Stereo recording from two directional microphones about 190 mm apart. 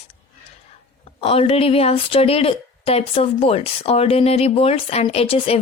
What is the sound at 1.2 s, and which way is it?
A woman's voice, 30° left (ahead or behind).